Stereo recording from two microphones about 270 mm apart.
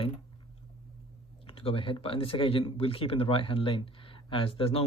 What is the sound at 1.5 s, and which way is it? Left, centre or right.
Speech, centre.